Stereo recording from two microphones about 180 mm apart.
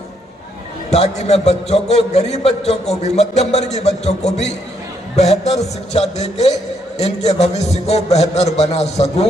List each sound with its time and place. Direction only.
0.9 s a man's voice: 35° left (ahead or behind)